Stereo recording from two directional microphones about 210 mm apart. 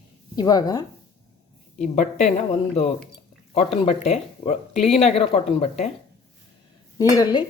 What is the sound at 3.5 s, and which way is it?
Speech, 30° left (ahead or behind).